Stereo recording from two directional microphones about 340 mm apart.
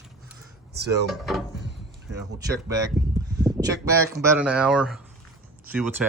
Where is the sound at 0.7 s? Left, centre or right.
Right.